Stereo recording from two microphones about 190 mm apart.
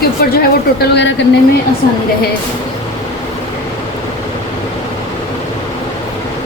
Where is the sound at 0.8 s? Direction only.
65° left (ahead or behind).